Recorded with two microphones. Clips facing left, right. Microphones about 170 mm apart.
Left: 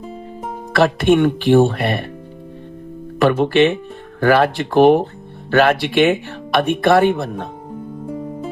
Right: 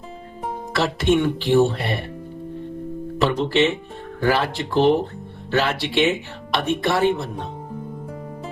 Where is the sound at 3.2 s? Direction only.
60° left (ahead or behind).